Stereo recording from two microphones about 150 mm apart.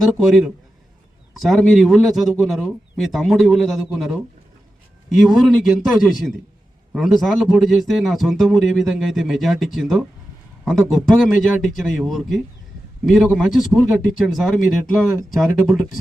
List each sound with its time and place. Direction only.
0.0 s a man's voice: centre (ahead or behind)